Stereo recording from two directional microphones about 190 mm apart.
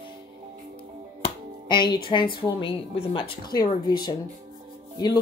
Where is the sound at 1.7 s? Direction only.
25° left (ahead or behind).